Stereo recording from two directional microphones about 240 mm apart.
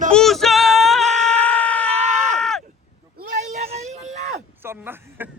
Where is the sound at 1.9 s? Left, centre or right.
Right.